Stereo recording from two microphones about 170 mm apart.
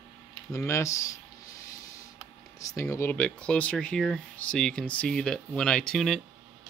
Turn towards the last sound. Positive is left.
turn(degrees=0)  # may be behind; listen again after turning